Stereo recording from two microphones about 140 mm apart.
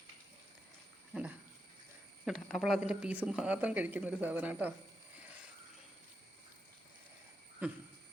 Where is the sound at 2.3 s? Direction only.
Centre (ahead or behind).